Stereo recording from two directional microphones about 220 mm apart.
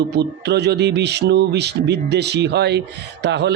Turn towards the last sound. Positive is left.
turn(degrees=-50)  # may be behind; listen again after turning